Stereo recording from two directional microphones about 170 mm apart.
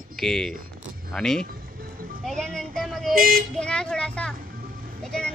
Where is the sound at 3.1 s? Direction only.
60° right (ahead or behind).